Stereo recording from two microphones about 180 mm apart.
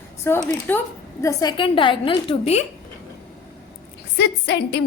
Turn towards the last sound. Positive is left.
turn(degrees=70)  # may be behind; listen again after turning